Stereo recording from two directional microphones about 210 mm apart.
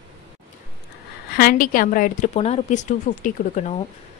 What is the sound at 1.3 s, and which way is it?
A woman's voice, 45° left (ahead or behind).